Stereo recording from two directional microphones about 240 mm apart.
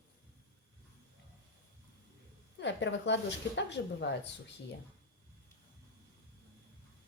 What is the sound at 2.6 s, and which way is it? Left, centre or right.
Speech, left.